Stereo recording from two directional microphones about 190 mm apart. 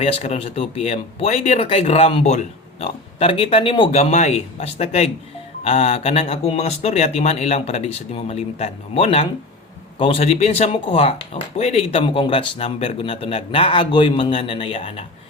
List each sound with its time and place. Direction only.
0.0 s speech: 35° left (ahead or behind)